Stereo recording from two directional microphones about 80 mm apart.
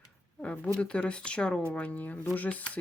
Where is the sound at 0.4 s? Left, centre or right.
Centre.